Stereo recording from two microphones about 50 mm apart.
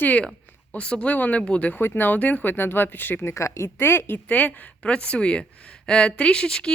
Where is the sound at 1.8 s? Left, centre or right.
Left.